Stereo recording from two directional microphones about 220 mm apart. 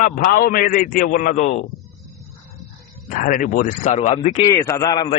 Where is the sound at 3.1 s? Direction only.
35° left (ahead or behind).